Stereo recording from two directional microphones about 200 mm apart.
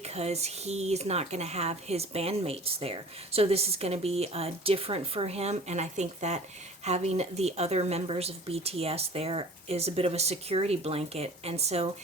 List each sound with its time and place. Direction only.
0.0 s speech: 30° right (ahead or behind)